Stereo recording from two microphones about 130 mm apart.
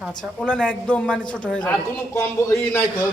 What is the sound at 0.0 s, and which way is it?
A man's voice, 5° left (ahead or behind).